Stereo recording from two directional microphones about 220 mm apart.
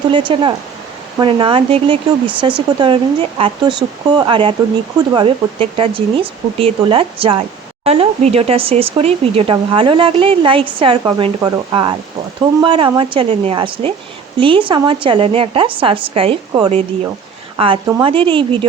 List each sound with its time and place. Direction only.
0.1 s speech: 20° right (ahead or behind)